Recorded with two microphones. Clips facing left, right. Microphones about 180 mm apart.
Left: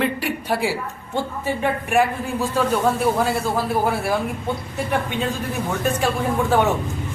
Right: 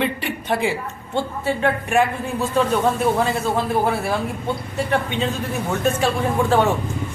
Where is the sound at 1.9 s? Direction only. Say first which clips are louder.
Left 2 dB; centre (ahead or behind).